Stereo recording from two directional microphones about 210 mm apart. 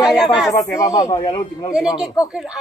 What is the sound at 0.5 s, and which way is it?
Speech, 15° left (ahead or behind).